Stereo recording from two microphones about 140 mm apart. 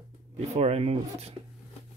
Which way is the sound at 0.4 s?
50° right (ahead or behind).